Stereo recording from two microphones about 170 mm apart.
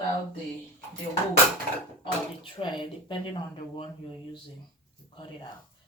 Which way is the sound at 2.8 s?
30° left (ahead or behind).